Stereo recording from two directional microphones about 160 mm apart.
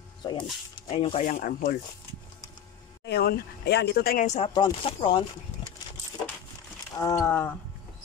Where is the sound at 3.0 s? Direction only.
80° left.